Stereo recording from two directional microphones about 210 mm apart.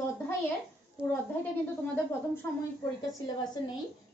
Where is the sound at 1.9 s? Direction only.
10° left (ahead or behind).